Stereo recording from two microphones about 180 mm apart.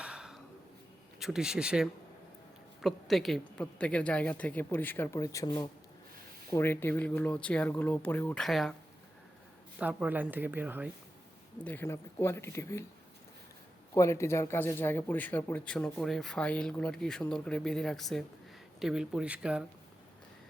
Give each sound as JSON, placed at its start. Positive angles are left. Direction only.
{"t": 0.0, "sound": "a sound", "side_deg": -5}
{"t": 1.2, "sound": "a woman's voice", "side_deg": -5}
{"t": 6.5, "sound": "a woman's voice", "side_deg": 15}
{"t": 8.4, "sound": "speech", "side_deg": 0}
{"t": 9.7, "sound": "speech", "side_deg": -5}
{"t": 11.6, "sound": "a woman's voice", "side_deg": 10}
{"t": 13.9, "sound": "speech", "side_deg": 15}